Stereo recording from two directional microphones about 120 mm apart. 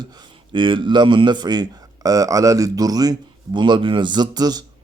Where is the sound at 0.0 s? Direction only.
35° right (ahead or behind).